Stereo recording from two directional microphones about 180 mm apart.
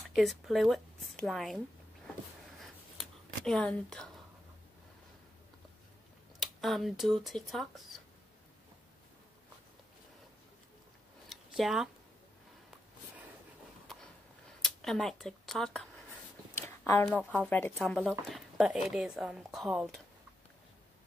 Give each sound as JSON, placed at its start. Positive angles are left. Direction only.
{"t": 0.1, "sound": "speech", "side_deg": 0}
{"t": 2.6, "sound": "a sound", "side_deg": 0}
{"t": 6.4, "sound": "speech", "side_deg": 0}
{"t": 11.2, "sound": "a sound", "side_deg": 0}
{"t": 14.6, "sound": "speech", "side_deg": 0}
{"t": 16.6, "sound": "speech", "side_deg": 15}